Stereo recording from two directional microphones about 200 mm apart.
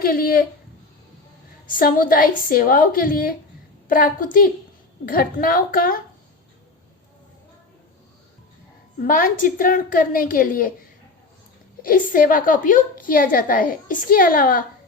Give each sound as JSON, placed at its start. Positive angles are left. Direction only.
{"t": 0.0, "sound": "a woman's voice", "side_deg": 45}
{"t": 1.6, "sound": "a woman's voice", "side_deg": 45}
{"t": 9.0, "sound": "a woman's voice", "side_deg": 45}
{"t": 11.8, "sound": "a woman's voice", "side_deg": 45}